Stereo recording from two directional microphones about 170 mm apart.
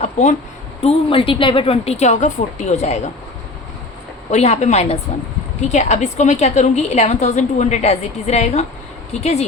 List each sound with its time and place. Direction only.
0.0 s a sound: 45° left (ahead or behind)
0.8 s a woman's voice: 35° left (ahead or behind)
4.3 s a woman's voice: 40° left (ahead or behind)